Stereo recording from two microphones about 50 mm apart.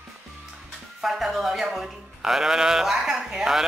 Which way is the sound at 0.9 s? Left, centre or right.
Centre.